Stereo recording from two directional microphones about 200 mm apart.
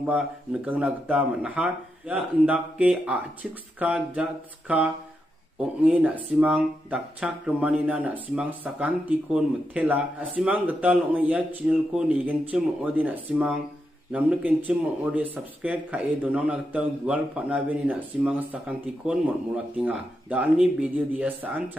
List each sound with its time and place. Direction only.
0.0 s speech: 5° right (ahead or behind)
5.9 s speech: 5° right (ahead or behind)